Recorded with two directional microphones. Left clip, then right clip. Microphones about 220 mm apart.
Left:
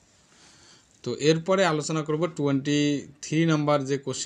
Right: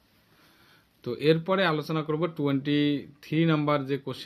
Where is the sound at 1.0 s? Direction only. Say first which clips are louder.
Left 1 dB; 20° left (ahead or behind).